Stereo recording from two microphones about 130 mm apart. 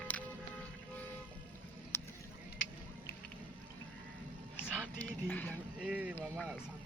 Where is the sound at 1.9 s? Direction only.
20° left (ahead or behind).